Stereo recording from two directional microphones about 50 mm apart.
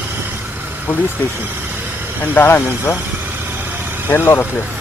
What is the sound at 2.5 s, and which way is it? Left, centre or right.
Speech, left.